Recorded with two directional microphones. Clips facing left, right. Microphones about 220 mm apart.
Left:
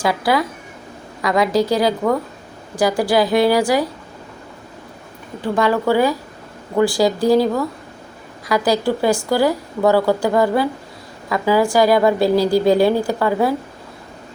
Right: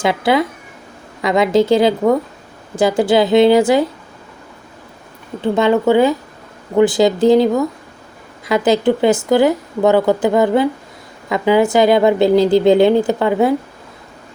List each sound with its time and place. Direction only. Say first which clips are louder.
0.0 s speech: right 3 dB; 25° right (ahead or behind)
5.4 s speech: right 4 dB; 25° right (ahead or behind)